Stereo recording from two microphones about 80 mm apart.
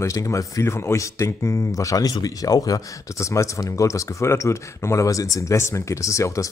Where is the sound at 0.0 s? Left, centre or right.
Left.